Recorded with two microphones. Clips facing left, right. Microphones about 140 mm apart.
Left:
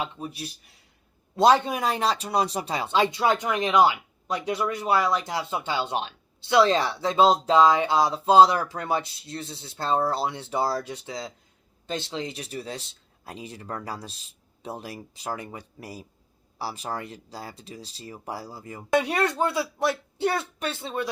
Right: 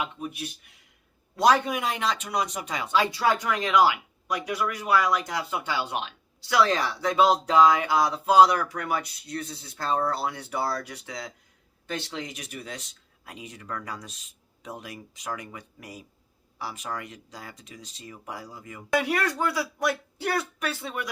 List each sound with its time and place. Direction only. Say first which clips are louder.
0.0 s speech: even; 35° left (ahead or behind)